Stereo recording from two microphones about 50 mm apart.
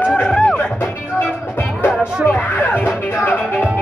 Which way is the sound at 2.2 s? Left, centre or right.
Left.